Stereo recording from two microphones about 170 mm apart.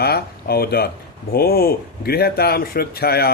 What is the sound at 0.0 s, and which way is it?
Speech, 65° left (ahead or behind).